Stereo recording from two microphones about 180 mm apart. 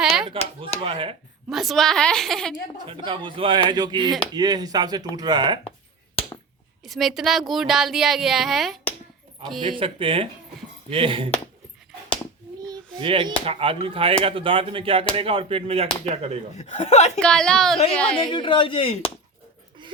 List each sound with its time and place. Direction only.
0.0 s a sound: 5° right (ahead or behind)
0.9 s speech: 30° right (ahead or behind)
1.5 s speech: centre (ahead or behind)
2.8 s speech: 25° right (ahead or behind)
6.8 s speech: centre (ahead or behind)
9.6 s speech: 30° right (ahead or behind)
12.6 s speech: 25° right (ahead or behind)
16.6 s speech: 40° left (ahead or behind)
17.2 s speech: 5° left (ahead or behind)
18.2 s speech: 25° left (ahead or behind)